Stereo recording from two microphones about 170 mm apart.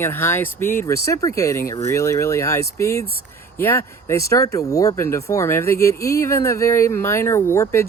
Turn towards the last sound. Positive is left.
turn(degrees=15)  # may be behind; listen again after turning